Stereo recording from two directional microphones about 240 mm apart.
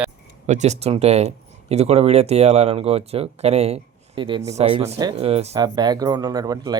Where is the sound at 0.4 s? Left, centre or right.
Right.